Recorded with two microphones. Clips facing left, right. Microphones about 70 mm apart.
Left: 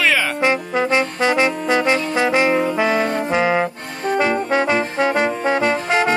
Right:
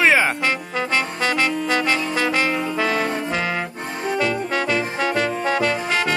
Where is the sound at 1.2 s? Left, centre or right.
Left.